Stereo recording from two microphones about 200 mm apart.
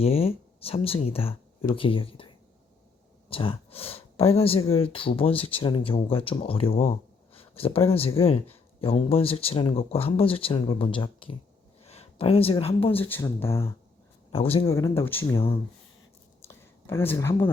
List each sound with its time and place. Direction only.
0.0 s speech: 30° left (ahead or behind)
13.1 s speech: 10° left (ahead or behind)
14.3 s speech: 30° left (ahead or behind)
14.8 s speech: 15° left (ahead or behind)
16.5 s a sound: 10° left (ahead or behind)